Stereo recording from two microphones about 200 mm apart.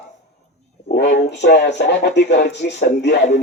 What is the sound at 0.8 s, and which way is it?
A man's voice, 55° left (ahead or behind).